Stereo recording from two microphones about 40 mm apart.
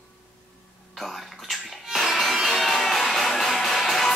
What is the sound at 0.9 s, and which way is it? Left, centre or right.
Speech, centre.